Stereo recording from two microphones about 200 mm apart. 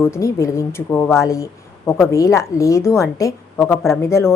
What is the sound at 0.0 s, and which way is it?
A woman's voice, 15° left (ahead or behind).